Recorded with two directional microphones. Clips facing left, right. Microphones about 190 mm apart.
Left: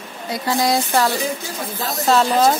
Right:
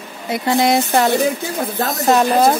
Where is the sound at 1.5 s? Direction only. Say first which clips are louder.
Right 6 dB; 50° right (ahead or behind).